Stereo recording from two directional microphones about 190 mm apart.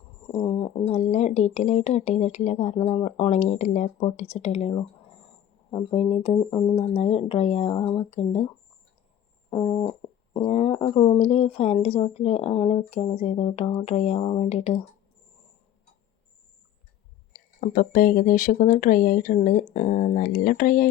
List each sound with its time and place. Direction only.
0.3 s speech: 35° left (ahead or behind)
9.5 s speech: 25° left (ahead or behind)
17.3 s speech: 45° left (ahead or behind)